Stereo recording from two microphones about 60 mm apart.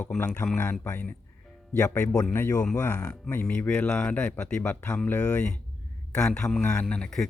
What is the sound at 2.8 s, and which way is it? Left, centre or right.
Speech, left.